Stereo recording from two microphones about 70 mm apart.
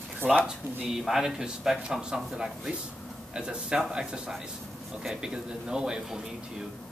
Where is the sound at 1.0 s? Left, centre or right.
Centre.